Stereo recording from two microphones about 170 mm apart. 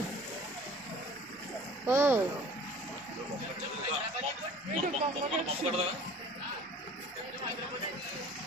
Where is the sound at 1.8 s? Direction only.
15° right (ahead or behind).